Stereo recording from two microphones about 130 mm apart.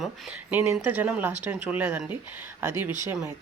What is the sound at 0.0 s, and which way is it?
A man's voice, 10° right (ahead or behind).